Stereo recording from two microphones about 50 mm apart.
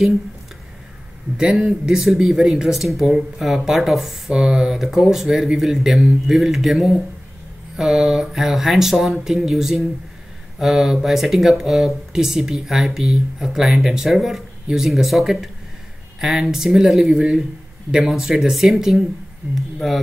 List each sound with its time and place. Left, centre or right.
1.3 s speech: centre
2.7 s speech: centre
17.1 s speech: centre
18.0 s speech: centre